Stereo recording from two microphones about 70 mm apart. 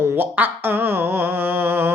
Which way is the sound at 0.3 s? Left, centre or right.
Right.